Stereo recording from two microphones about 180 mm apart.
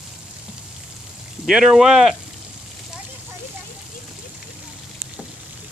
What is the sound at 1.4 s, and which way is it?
Speech, 5° right (ahead or behind).